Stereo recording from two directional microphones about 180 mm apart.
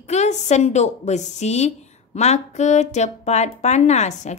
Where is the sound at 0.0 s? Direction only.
40° left (ahead or behind).